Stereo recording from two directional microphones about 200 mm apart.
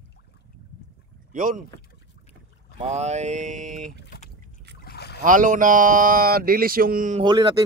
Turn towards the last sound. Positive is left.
turn(degrees=-20)  # may be behind; listen again after turning